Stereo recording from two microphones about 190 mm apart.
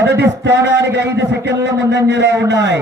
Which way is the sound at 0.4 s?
65° right (ahead or behind).